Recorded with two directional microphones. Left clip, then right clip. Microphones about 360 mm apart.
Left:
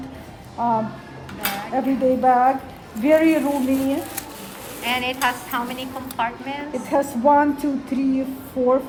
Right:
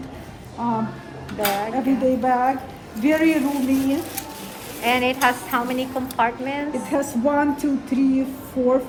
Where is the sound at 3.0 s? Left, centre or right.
Left.